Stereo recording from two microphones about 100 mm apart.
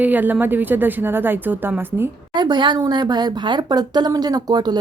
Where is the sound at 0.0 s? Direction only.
15° right (ahead or behind).